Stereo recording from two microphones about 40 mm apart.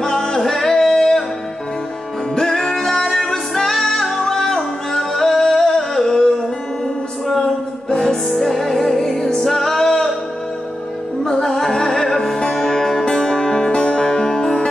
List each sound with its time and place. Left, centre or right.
0.0 s music: centre
2.3 s music: centre
7.9 s music: centre
11.4 s music: centre